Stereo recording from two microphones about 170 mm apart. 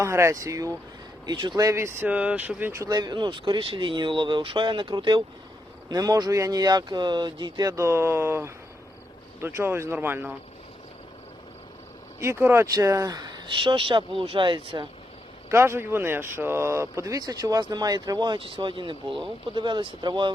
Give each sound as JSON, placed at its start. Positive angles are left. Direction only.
{"t": 0.0, "sound": "speech", "side_deg": -15}
{"t": 12.2, "sound": "speech", "side_deg": -15}
{"t": 15.4, "sound": "speech", "side_deg": -15}